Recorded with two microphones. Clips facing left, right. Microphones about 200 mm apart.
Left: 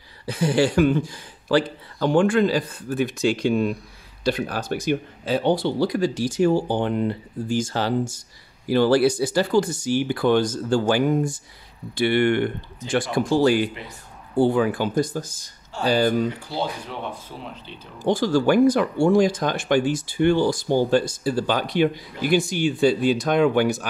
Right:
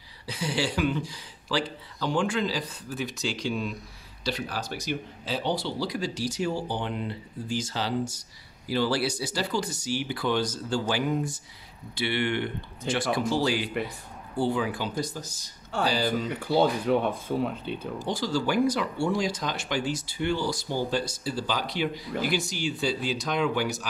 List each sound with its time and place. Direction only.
0.3 s speech: 50° left (ahead or behind)
16.3 s speech: 55° right (ahead or behind)
18.0 s speech: 55° left (ahead or behind)